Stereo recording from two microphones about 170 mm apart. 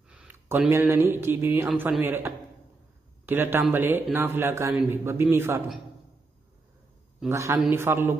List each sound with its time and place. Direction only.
0.1 s a man's voice: 10° right (ahead or behind)
7.2 s a man's voice: 15° right (ahead or behind)